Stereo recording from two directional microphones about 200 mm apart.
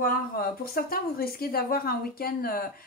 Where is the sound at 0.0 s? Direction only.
50° left (ahead or behind).